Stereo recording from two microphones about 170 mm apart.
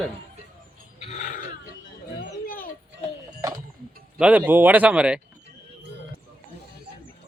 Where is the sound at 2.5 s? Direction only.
55° left (ahead or behind).